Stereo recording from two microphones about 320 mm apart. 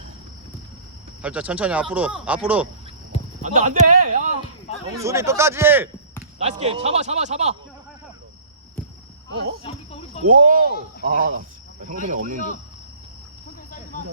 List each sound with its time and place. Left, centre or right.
1.2 s speech: centre
3.4 s speech: right
4.7 s a sound: centre
5.0 s a man's voice: centre
6.4 s speech: centre
9.7 s speech: centre
10.2 s speech: right